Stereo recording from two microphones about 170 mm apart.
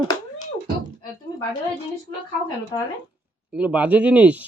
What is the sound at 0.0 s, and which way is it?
Beatboxing, 25° left (ahead or behind).